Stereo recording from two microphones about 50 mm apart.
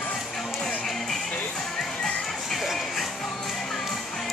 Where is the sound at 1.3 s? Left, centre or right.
Left.